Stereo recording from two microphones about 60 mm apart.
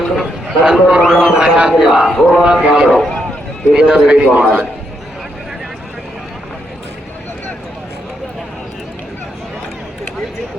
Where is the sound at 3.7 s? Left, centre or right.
Centre.